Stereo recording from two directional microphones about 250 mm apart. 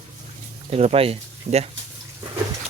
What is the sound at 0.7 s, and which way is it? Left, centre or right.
Speech, right.